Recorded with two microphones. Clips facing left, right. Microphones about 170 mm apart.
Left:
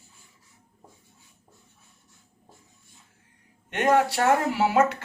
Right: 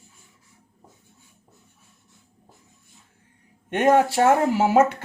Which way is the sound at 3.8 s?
25° right (ahead or behind).